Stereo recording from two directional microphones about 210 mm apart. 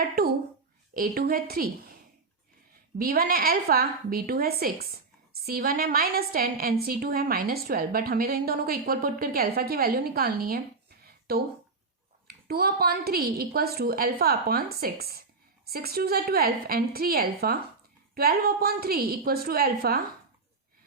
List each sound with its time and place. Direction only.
0.9 s a woman's voice: 45° right (ahead or behind)
3.0 s a woman's voice: 45° right (ahead or behind)